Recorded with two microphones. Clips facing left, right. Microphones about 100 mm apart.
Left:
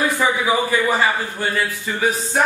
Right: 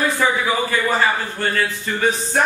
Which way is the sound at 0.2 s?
15° left (ahead or behind).